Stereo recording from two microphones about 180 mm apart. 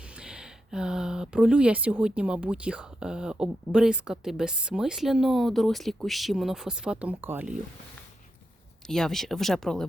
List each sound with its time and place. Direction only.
0.2 s speech: 5° right (ahead or behind)
8.9 s speech: centre (ahead or behind)